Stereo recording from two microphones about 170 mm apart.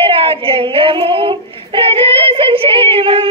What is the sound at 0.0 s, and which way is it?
Child singing, 35° right (ahead or behind).